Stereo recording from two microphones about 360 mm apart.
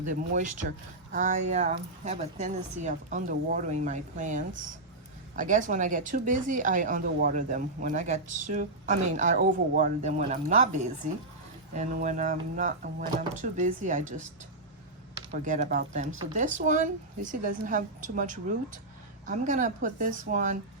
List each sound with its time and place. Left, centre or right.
0.0 s a woman's voice: right
11.7 s a woman's voice: right
15.3 s a woman's voice: right